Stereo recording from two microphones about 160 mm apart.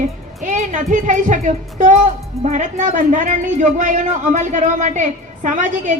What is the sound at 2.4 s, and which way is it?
A woman's voice, 50° right (ahead or behind).